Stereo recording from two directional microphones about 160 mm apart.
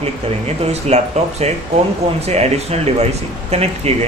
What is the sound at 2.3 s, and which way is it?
Speech, 40° right (ahead or behind).